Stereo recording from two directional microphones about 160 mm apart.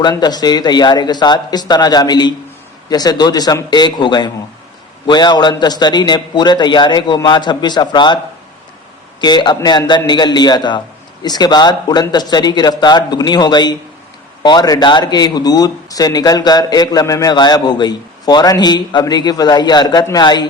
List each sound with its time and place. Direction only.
0.0 s a man's voice: 25° left (ahead or behind)
9.2 s a man's voice: 25° left (ahead or behind)